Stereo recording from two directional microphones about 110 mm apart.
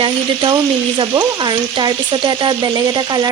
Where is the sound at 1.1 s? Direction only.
40° right (ahead or behind).